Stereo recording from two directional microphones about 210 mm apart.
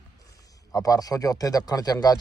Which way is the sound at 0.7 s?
15° left (ahead or behind).